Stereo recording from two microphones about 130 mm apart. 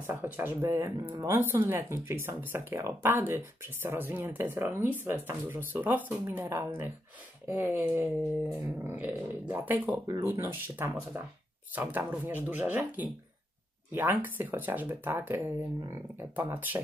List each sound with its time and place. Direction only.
0.0 s speech: 15° right (ahead or behind)